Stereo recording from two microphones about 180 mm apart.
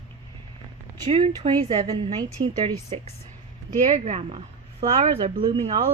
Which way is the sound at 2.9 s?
35° right (ahead or behind).